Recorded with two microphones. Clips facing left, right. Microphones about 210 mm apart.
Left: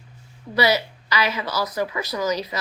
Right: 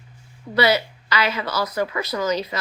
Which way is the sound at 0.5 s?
15° left (ahead or behind).